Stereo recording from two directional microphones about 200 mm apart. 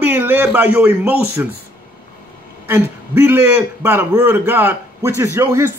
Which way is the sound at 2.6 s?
10° right (ahead or behind).